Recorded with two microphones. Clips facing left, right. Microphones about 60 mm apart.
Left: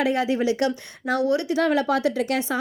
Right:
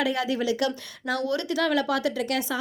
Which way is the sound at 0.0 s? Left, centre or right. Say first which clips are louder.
Left 4 dB; left.